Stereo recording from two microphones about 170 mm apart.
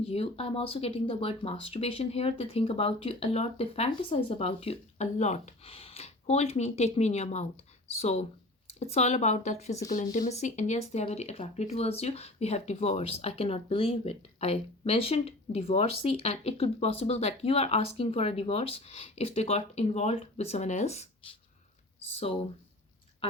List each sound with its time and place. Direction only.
0.0 s speech: 35° left (ahead or behind)
23.2 s speech: 35° left (ahead or behind)